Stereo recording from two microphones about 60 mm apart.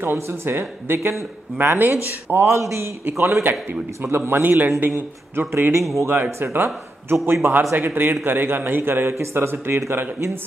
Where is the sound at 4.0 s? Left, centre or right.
Right.